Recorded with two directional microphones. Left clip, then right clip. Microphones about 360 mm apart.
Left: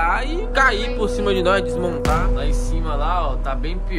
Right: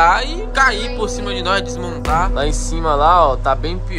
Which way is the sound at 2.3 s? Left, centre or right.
Centre.